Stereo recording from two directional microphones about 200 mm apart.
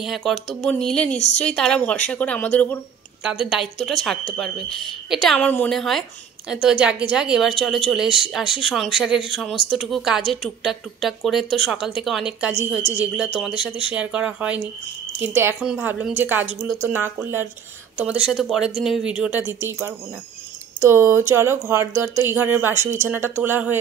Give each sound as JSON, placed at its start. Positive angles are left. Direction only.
{"t": 0.0, "sound": "speech", "side_deg": 0}
{"t": 1.1, "sound": "a woman's voice", "side_deg": 35}
{"t": 1.4, "sound": "speech", "side_deg": 5}
{"t": 3.3, "sound": "speech", "side_deg": -5}